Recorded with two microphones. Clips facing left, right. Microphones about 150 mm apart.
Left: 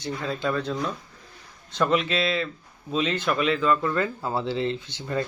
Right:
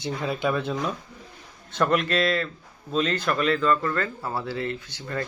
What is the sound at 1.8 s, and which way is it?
A man's voice, centre (ahead or behind).